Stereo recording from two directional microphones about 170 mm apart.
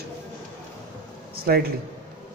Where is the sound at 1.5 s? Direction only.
65° right (ahead or behind).